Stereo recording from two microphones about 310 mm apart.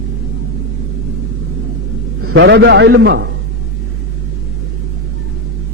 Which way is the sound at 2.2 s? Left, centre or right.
Right.